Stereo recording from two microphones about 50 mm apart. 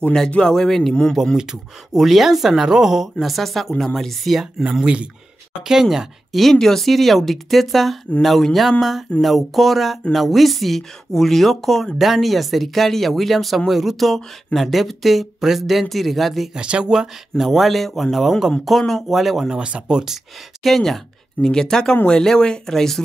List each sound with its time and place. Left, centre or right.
0.5 s speech: centre
1.1 s speech: centre
4.8 s speech: right
5.6 s speech: centre
6.5 s speech: centre
16.5 s speech: right
16.9 s speech: centre
19.5 s speech: centre
20.6 s speech: centre